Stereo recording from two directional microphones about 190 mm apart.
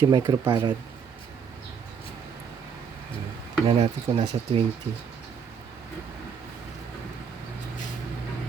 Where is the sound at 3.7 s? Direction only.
30° right (ahead or behind).